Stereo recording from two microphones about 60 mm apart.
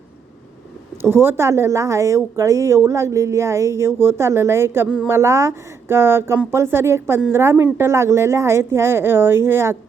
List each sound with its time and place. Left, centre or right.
1.0 s speech: right